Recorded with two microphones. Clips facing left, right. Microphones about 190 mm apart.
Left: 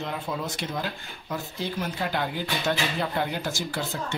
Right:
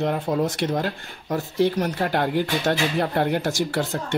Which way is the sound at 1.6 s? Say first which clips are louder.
Right 12 dB; 70° right (ahead or behind).